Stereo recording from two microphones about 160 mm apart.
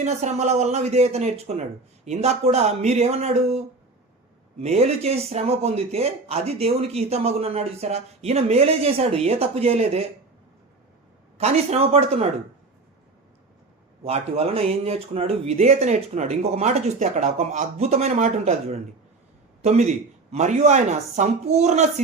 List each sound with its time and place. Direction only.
0.0 s speech: 45° right (ahead or behind)
4.6 s speech: 40° right (ahead or behind)
11.3 s speech: 40° right (ahead or behind)
14.0 s speech: 40° right (ahead or behind)